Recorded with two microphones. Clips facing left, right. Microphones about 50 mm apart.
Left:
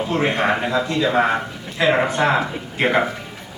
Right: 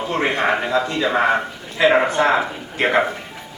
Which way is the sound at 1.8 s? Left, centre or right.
Centre.